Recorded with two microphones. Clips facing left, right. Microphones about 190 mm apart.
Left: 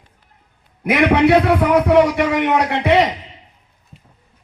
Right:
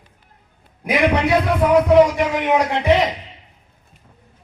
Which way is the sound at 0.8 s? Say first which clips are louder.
Left 4 dB; 70° left (ahead or behind).